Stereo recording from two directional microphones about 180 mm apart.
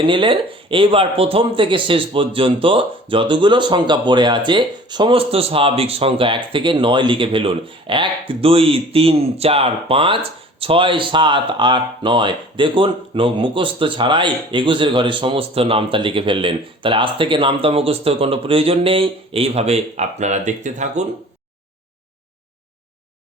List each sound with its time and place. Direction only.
0.0 s speech: 30° right (ahead or behind)